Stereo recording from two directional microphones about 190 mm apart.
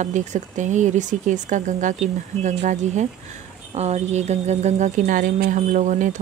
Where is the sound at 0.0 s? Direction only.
40° right (ahead or behind).